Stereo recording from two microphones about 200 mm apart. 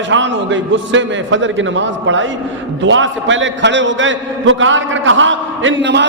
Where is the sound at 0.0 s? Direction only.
65° right (ahead or behind).